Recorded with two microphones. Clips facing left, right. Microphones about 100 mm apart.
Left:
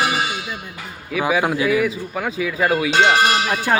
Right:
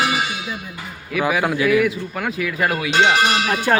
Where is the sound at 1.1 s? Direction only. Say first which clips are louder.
Even; 20° left (ahead or behind).